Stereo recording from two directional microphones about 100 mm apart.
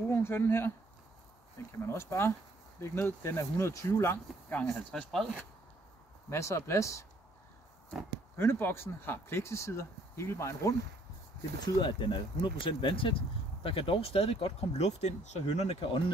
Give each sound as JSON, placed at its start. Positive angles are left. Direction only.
{"t": 0.1, "sound": "speech", "side_deg": 25}
{"t": 1.9, "sound": "speech", "side_deg": 25}
{"t": 4.6, "sound": "speech", "side_deg": 0}
{"t": 6.3, "sound": "speech", "side_deg": 30}
{"t": 8.4, "sound": "speech", "side_deg": 20}
{"t": 11.6, "sound": "speech", "side_deg": 45}
{"t": 15.6, "sound": "speech", "side_deg": 75}